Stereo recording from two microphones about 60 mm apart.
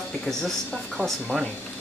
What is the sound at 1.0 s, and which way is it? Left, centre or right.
Speech, left.